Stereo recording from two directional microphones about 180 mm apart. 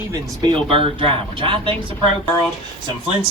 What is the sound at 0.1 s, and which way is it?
Speech, 25° right (ahead or behind).